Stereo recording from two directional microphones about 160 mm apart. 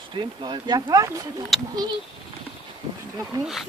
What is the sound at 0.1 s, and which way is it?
Speech, 25° right (ahead or behind).